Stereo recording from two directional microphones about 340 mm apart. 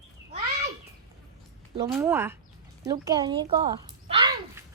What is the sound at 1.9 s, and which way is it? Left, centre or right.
Speech, centre.